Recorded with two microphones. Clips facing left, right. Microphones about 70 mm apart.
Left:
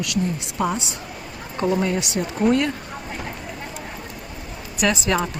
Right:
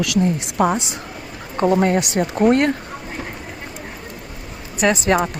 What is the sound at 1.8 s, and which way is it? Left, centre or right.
Speech, right.